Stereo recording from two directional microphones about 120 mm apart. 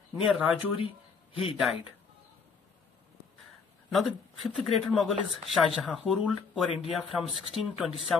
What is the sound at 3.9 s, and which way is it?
Speech, centre (ahead or behind).